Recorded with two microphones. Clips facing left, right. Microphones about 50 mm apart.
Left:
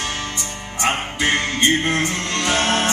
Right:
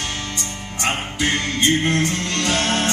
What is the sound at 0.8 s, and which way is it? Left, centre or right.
Music, centre.